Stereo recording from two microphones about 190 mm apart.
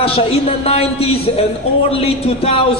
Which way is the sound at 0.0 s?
30° left (ahead or behind).